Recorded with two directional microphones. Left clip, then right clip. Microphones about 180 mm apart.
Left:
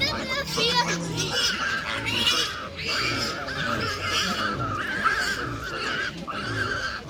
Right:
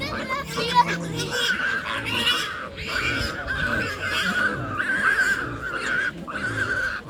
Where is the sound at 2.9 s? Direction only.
Centre (ahead or behind).